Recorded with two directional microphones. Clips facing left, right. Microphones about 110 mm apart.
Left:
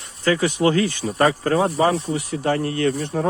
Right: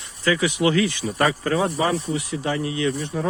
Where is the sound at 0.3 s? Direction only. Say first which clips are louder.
Left 2 dB; 40° left (ahead or behind).